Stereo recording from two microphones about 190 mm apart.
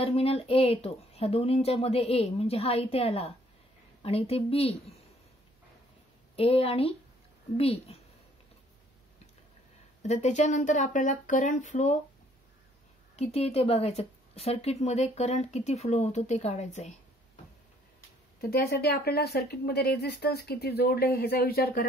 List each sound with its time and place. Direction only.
0.0 s a woman's voice: 30° left (ahead or behind)
6.3 s a woman's voice: 30° left (ahead or behind)
10.0 s a woman's voice: 40° left (ahead or behind)
13.1 s a woman's voice: 35° left (ahead or behind)
18.4 s speech: 55° left (ahead or behind)